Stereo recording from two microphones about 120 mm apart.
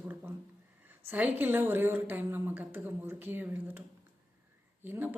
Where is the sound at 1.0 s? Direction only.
15° right (ahead or behind).